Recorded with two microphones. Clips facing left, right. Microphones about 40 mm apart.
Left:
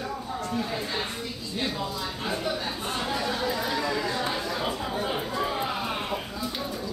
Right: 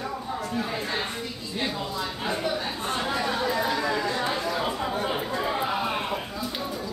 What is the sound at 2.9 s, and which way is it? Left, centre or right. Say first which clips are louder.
Chatter: right 3 dB; centre.